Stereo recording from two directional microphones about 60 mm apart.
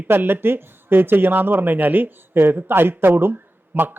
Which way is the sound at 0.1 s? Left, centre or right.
Right.